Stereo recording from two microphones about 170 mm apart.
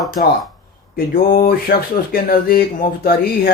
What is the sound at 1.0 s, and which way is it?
Speech, 65° left (ahead or behind).